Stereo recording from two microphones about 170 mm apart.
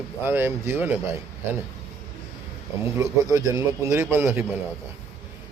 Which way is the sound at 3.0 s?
20° right (ahead or behind).